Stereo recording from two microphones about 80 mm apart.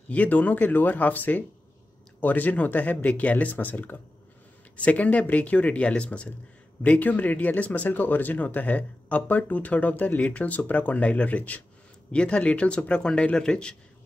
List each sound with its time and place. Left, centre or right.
0.1 s speech: centre